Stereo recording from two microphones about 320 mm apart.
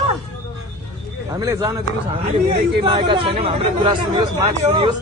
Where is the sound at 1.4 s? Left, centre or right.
Centre.